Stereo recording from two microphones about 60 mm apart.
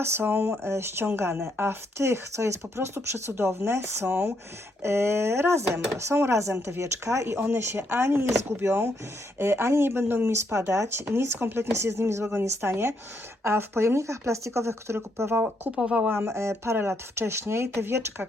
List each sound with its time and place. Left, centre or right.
0.0 s speech: right
0.6 s speech: right
11.7 s speech: right
15.7 s speech: centre
16.1 s speech: right